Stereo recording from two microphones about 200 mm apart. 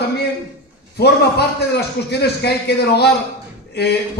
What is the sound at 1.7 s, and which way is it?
A man's voice, 55° left (ahead or behind).